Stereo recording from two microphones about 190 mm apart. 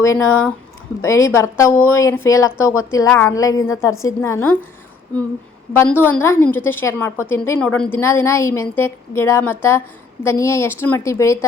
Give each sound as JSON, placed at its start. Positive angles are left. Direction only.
{"t": 0.0, "sound": "a woman's voice", "side_deg": 15}
{"t": 5.7, "sound": "a woman's voice", "side_deg": 10}